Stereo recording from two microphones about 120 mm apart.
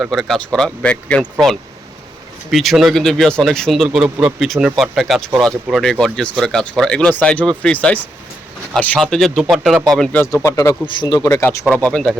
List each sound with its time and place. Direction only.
0.0 s speech: centre (ahead or behind)
2.5 s speech: centre (ahead or behind)
10.2 s speech: 15° left (ahead or behind)
10.5 s speech: 30° left (ahead or behind)
10.8 s speech: 40° left (ahead or behind)
11.7 s speech: 10° left (ahead or behind)